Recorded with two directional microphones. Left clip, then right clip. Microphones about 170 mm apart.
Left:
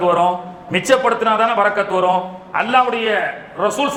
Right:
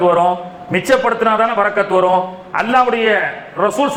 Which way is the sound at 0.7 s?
30° right (ahead or behind).